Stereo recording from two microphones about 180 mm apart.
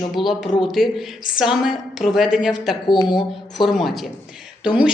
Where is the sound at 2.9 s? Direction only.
25° left (ahead or behind).